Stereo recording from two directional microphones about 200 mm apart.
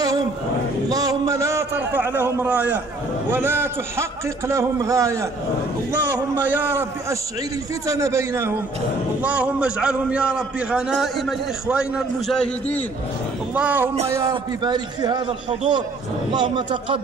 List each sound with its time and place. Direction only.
0.8 s a man's voice: 20° right (ahead or behind); by 12.8 s 5° left (ahead or behind)
13.6 s a man's voice: 10° right (ahead or behind)